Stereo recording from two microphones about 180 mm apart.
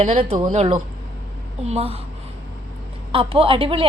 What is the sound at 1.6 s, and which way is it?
Speech, 35° right (ahead or behind).